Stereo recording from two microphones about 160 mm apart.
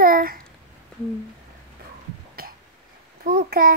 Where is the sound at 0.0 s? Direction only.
65° right (ahead or behind).